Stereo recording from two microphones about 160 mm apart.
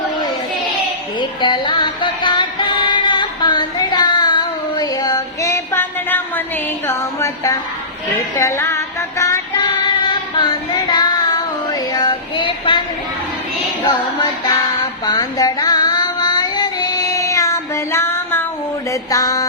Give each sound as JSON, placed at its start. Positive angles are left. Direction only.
{"t": 1.2, "sound": "music", "side_deg": 30}
{"t": 10.1, "sound": "child singing", "side_deg": 30}
{"t": 15.0, "sound": "child singing", "side_deg": 25}
{"t": 18.9, "sound": "a sound", "side_deg": 20}